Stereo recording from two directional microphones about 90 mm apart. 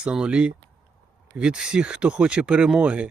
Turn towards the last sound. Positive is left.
turn(degrees=-15)  # may be behind; listen again after turning